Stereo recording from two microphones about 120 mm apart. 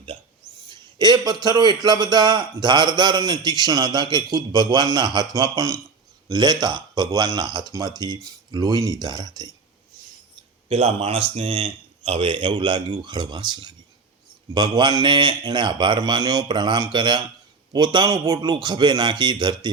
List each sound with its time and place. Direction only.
0.7 s a sound: 35° right (ahead or behind)
1.5 s speech: 35° right (ahead or behind)
10.7 s speech: 55° right (ahead or behind); by 19.7 s 40° right (ahead or behind)